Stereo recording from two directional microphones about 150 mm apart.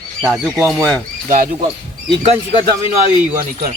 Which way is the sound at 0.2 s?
10° right (ahead or behind).